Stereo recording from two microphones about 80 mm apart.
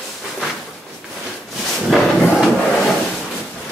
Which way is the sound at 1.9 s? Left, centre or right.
Centre.